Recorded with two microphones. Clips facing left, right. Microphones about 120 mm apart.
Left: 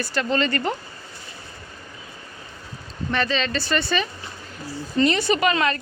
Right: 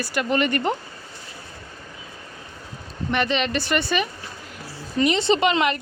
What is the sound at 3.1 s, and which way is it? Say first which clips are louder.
A woman's voice: right 1 dB; 15° right (ahead or behind).